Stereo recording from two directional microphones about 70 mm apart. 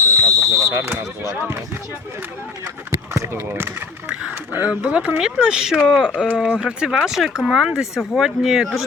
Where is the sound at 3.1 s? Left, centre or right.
Right.